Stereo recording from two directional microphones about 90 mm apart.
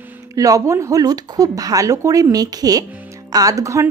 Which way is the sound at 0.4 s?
40° right (ahead or behind).